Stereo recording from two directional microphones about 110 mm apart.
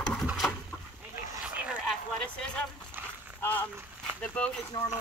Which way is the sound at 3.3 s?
15° left (ahead or behind).